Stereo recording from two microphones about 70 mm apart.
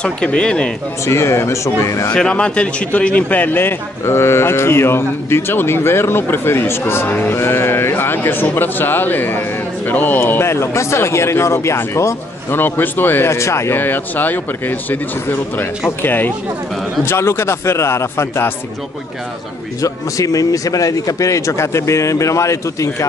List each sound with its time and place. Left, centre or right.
0.0 s speech: centre
1.0 s speech: left
2.1 s a man's voice: centre; by 12.5 s left
12.5 s a man's voice: left
13.7 s a man's voice: left
19.8 s speech: left